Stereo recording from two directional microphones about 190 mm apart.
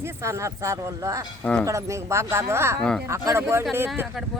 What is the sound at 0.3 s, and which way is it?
Speech, 15° right (ahead or behind).